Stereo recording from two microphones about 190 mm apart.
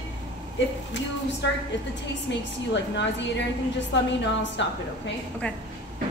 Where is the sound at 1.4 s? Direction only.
65° left (ahead or behind).